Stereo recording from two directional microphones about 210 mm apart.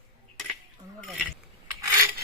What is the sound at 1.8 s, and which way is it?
Filing, 15° right (ahead or behind).